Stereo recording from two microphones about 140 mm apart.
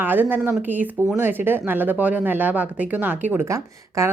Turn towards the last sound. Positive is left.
turn(degrees=-20)  # may be behind; listen again after turning